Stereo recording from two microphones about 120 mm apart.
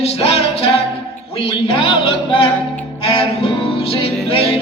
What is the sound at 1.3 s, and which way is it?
Speech, 50° left (ahead or behind).